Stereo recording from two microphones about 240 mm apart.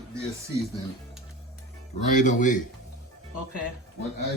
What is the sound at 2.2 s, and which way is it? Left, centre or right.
Speech, left.